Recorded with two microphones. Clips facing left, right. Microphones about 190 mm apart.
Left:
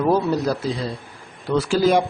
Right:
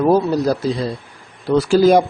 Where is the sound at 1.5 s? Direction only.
40° right (ahead or behind).